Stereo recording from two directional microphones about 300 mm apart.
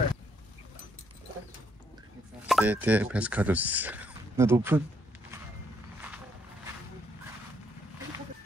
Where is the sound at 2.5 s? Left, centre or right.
Centre.